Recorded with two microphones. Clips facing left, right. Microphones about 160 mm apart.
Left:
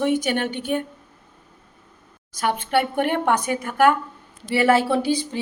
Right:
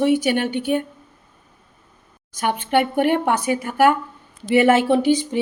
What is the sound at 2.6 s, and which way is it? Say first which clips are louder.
A woman's voice: right 5 dB; 10° right (ahead or behind).